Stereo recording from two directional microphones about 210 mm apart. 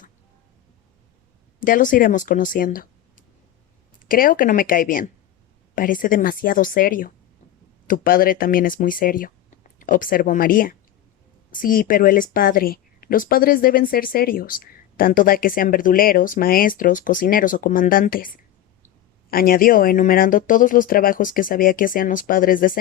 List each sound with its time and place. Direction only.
1.5 s a woman's voice: 40° left (ahead or behind)
19.3 s speech: 45° left (ahead or behind)